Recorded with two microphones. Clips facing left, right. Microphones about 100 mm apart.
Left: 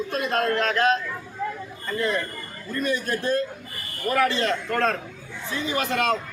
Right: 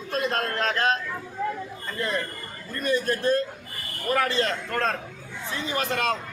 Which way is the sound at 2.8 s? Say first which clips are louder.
Right 2 dB; 35° right (ahead or behind).